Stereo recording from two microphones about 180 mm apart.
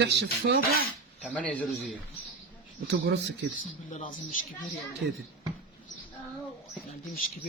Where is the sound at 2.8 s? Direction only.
70° right (ahead or behind).